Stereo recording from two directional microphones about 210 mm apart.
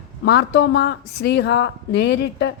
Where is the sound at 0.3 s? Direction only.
55° left (ahead or behind).